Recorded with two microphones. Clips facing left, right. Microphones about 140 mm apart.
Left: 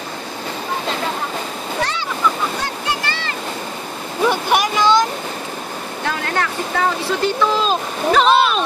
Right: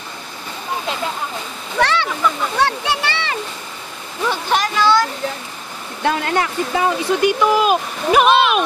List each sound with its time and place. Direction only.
1.8 s speech: 70° right (ahead or behind)
4.3 s speech: 15° left (ahead or behind)
6.0 s speech: 20° right (ahead or behind)